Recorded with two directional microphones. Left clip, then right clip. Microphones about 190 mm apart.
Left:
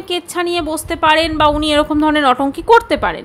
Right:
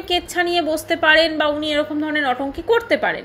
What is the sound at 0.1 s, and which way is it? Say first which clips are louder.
A woman's voice: left 1 dB; 20° left (ahead or behind).